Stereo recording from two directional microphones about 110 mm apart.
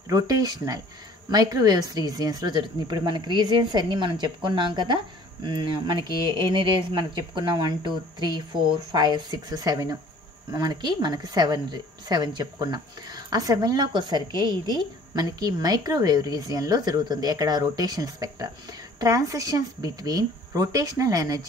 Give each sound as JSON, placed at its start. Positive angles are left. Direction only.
{"t": 0.1, "sound": "a woman's voice", "side_deg": -35}